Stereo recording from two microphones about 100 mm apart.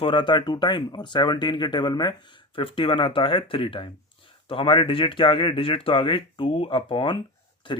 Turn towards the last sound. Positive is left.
turn(degrees=55)  # may be behind; listen again after turning